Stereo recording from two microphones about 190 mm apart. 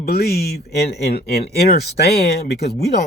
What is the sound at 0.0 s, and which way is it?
Speech, 55° left (ahead or behind).